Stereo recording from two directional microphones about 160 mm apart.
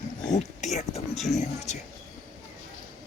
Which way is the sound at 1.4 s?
45° left (ahead or behind).